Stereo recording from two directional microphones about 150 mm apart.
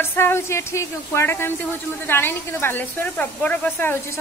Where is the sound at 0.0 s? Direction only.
15° left (ahead or behind).